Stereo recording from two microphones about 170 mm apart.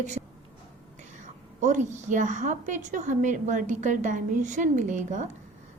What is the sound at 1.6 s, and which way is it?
A woman's voice, 45° right (ahead or behind).